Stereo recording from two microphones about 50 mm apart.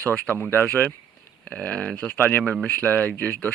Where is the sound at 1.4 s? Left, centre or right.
Left.